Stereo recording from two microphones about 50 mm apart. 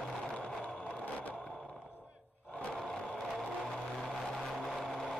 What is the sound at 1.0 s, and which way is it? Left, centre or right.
Vehicle, left.